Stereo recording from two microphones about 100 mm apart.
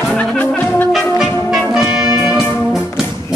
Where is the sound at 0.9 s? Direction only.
5° right (ahead or behind).